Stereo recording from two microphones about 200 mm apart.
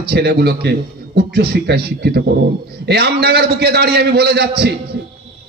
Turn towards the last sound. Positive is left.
turn(degrees=-55)  # may be behind; listen again after turning